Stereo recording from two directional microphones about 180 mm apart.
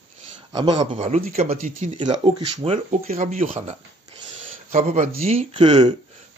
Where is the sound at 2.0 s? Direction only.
25° right (ahead or behind).